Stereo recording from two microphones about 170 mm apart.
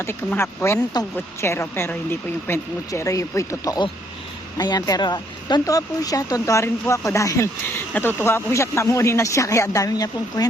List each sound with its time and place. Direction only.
0.0 s a woman's voice: 15° left (ahead or behind)